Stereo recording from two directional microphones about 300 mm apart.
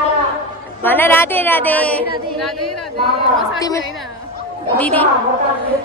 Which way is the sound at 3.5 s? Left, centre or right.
Centre.